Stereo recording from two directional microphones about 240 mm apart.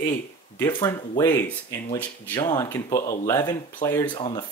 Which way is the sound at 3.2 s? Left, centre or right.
Centre.